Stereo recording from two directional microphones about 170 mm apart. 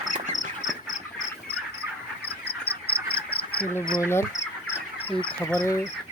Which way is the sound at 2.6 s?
65° left (ahead or behind).